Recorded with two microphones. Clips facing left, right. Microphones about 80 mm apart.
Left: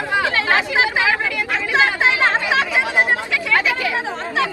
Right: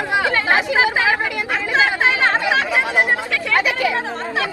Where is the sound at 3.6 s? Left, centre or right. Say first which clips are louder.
Right 5 dB; centre.